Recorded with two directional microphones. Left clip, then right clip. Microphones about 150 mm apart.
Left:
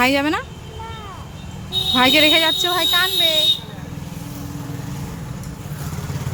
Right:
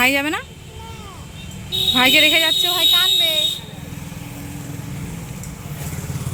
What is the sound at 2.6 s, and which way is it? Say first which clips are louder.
Speech: right 1 dB; 30° left (ahead or behind).